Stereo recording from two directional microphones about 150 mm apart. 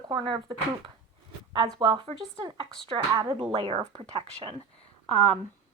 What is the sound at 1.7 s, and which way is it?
Speech, 30° right (ahead or behind).